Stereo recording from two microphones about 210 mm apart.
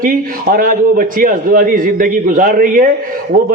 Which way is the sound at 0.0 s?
40° right (ahead or behind).